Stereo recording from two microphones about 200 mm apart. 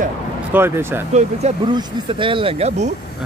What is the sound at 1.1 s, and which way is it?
Speech, 35° right (ahead or behind).